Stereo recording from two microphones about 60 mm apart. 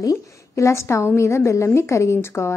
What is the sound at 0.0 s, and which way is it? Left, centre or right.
Speech, left.